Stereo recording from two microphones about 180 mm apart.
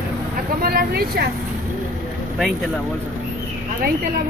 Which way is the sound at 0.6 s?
60° right (ahead or behind).